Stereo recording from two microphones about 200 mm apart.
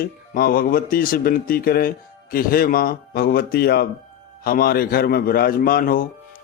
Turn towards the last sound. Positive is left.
turn(degrees=45)  # may be behind; listen again after turning